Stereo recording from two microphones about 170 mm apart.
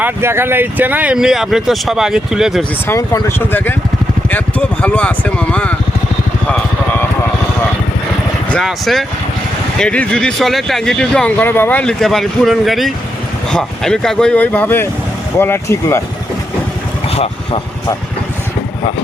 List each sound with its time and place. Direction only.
0.0 s speech: 15° right (ahead or behind)
2.8 s speech: 15° left (ahead or behind)
8.5 s speech: centre (ahead or behind)
17.1 s vehicle: 35° left (ahead or behind)